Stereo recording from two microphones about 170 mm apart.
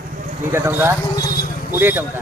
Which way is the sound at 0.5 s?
15° right (ahead or behind).